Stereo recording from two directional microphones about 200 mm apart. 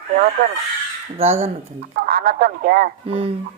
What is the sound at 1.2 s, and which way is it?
Speech, 30° right (ahead or behind).